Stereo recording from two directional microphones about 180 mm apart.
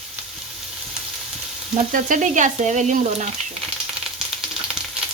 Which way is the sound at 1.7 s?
45° right (ahead or behind).